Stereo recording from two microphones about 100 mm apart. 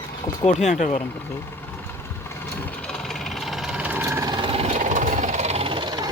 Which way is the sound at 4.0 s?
25° right (ahead or behind).